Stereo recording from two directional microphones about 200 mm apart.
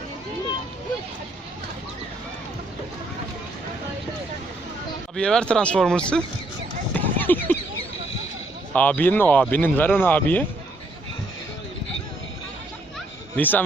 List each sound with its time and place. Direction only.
5.1 s speech: 5° left (ahead or behind)
6.9 s a sound: 10° left (ahead or behind)
8.7 s speech: 5° left (ahead or behind)
13.3 s speech: 10° left (ahead or behind)